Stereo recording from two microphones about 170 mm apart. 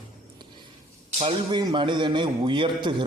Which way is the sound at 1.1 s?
30° right (ahead or behind).